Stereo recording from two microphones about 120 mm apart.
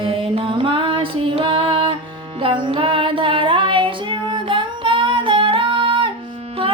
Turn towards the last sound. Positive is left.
turn(degrees=-45)  # may be behind; listen again after turning